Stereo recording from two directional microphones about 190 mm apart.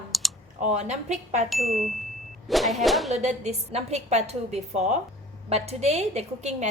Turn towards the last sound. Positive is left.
turn(degrees=-35)  # may be behind; listen again after turning